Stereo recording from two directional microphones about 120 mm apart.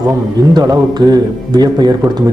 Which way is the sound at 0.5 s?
35° right (ahead or behind).